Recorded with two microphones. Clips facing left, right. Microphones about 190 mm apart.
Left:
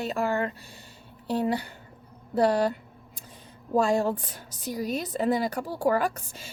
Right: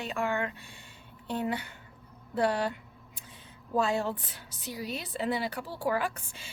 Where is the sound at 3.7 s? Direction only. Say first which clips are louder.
Left 5 dB; 45° left (ahead or behind).